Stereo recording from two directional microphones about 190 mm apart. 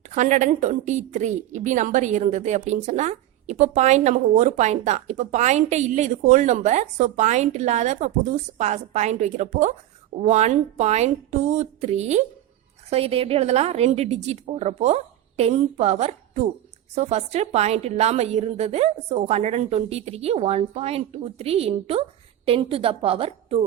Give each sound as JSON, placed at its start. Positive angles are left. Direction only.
{"t": 0.1, "sound": "a woman's voice", "side_deg": -40}